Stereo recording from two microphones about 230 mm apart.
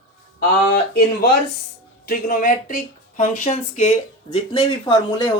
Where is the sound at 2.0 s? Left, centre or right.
Left.